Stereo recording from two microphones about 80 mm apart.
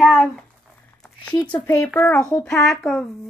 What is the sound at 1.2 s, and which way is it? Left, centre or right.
Speech, centre.